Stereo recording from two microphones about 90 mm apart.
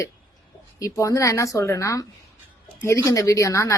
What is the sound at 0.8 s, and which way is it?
A woman's voice, 35° left (ahead or behind).